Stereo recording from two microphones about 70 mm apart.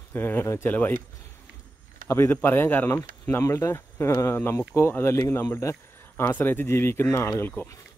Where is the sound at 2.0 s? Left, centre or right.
Left.